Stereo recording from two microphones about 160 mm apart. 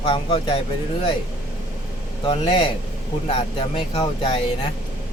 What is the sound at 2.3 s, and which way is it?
Speech, 30° left (ahead or behind).